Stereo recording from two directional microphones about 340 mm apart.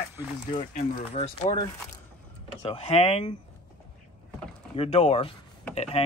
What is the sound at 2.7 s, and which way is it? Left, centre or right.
Speech, centre.